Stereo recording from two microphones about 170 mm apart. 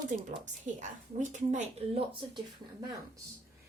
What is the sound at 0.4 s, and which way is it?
A woman's voice, 45° right (ahead or behind).